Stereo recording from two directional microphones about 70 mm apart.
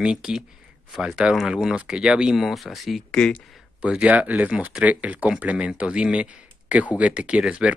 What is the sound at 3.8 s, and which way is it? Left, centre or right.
Speech, centre.